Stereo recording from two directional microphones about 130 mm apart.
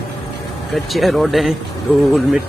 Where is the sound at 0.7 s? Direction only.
Centre (ahead or behind).